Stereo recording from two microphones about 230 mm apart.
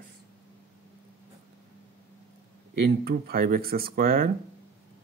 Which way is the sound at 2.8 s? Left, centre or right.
Right.